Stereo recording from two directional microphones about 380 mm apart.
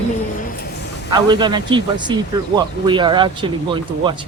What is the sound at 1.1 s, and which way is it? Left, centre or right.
Speech, centre.